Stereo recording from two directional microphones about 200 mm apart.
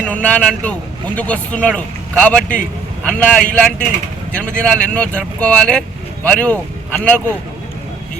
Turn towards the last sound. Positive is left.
turn(degrees=5)  # may be behind; listen again after turning